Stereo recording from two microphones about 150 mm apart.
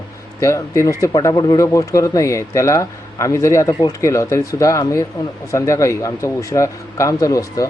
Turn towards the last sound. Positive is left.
turn(degrees=20)  # may be behind; listen again after turning